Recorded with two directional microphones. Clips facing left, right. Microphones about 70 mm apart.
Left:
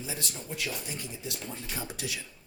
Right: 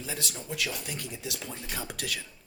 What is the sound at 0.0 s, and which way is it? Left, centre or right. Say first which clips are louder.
Speech: right 1 dB; right.